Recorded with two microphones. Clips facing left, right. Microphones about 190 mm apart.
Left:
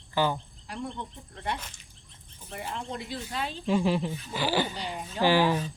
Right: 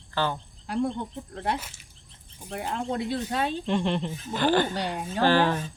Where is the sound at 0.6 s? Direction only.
60° right (ahead or behind).